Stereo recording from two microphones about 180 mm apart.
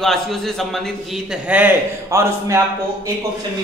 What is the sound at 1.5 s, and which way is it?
A man's voice, 10° right (ahead or behind).